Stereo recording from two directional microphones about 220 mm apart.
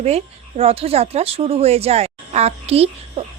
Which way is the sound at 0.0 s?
30° right (ahead or behind).